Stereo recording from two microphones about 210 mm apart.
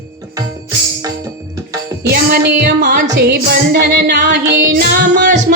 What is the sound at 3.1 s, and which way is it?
Music, 55° right (ahead or behind).